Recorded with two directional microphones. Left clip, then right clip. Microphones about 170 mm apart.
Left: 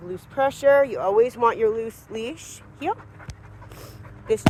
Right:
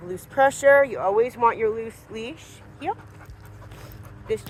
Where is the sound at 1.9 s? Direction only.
40° left (ahead or behind).